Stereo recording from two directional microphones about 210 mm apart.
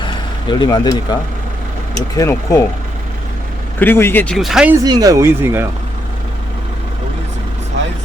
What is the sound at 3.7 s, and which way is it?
Speech, 10° left (ahead or behind).